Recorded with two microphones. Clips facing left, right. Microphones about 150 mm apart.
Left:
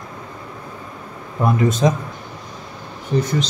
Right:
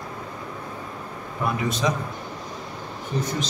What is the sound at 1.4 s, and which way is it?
Speech, 50° left (ahead or behind).